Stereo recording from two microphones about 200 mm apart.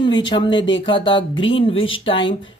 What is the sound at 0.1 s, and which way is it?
Speech, 25° left (ahead or behind).